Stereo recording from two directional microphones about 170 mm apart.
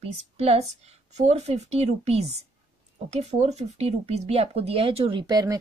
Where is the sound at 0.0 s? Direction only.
35° right (ahead or behind).